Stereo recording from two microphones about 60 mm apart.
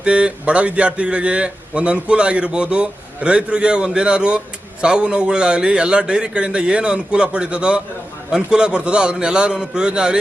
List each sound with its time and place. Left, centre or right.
0.0 s a man's voice: centre